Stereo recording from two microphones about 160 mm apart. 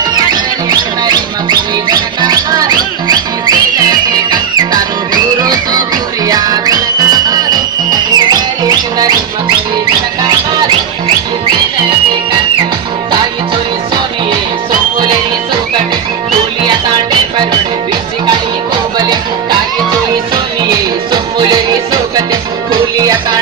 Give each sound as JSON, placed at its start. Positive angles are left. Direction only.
{"t": 0.0, "sound": "music", "side_deg": -25}
{"t": 16.6, "sound": "music", "side_deg": -25}
{"t": 18.9, "sound": "music", "side_deg": -25}
{"t": 20.7, "sound": "music", "side_deg": -25}